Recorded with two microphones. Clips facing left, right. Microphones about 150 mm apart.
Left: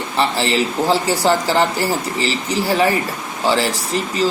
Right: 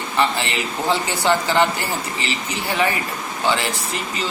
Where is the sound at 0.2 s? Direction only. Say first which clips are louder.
Left 4 dB; 35° left (ahead or behind).